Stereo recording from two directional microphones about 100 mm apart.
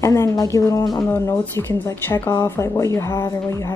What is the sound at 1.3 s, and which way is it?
Speech, 25° left (ahead or behind).